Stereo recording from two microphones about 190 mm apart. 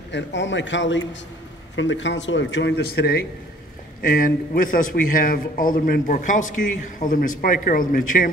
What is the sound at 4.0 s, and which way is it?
A man's voice, 45° left (ahead or behind).